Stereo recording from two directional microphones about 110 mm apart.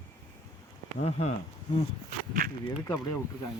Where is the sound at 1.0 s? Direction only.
75° left (ahead or behind).